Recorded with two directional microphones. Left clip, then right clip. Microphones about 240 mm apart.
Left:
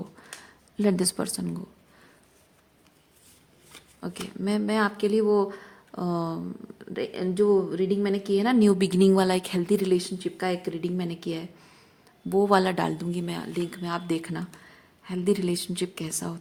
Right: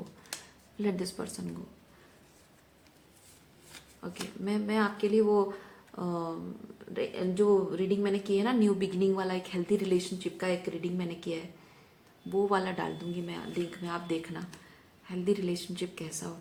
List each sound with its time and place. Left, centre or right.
0.8 s speech: left
4.0 s a woman's voice: left